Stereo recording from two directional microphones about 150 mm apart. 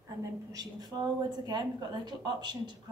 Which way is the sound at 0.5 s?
25° right (ahead or behind).